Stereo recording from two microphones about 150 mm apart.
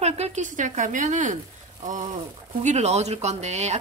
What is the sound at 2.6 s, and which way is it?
A woman's voice, 50° right (ahead or behind).